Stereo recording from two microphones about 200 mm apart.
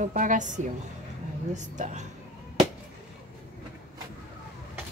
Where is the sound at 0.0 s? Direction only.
40° right (ahead or behind).